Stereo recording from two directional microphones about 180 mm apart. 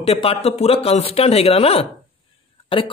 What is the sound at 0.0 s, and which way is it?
A man's voice, 30° left (ahead or behind).